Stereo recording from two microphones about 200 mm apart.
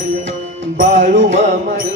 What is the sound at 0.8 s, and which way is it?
Music, 40° right (ahead or behind).